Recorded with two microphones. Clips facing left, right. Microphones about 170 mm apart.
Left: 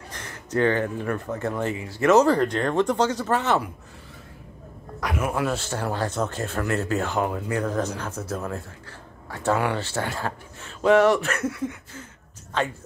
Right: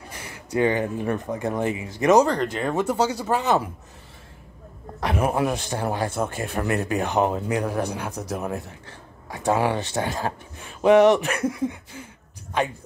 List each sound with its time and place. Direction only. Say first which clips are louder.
0.1 s speech: even; 10° right (ahead or behind)
2.2 s speech: left 3 dB; centre (ahead or behind)
5.0 s a man's voice: right 4 dB; 35° right (ahead or behind)
5.3 s speech: right 2 dB; 20° right (ahead or behind)